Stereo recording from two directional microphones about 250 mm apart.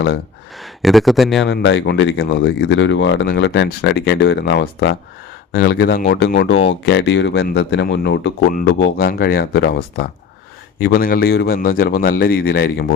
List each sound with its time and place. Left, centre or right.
0.8 s speech: centre
1.5 s a man's voice: left